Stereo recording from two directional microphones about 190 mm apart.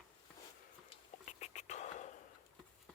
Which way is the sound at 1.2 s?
40° left (ahead or behind).